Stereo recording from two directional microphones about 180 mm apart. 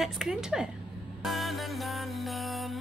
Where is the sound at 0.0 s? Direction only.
Centre (ahead or behind).